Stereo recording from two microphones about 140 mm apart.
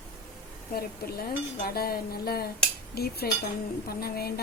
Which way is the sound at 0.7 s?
90° left.